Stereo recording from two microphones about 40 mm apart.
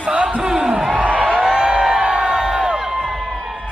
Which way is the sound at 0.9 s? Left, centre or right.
Right.